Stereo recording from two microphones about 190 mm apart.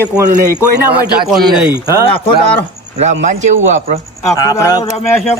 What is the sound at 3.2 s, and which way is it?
Speech, 40° right (ahead or behind).